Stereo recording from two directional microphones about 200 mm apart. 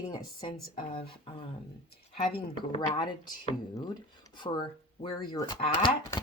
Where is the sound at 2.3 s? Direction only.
30° left (ahead or behind).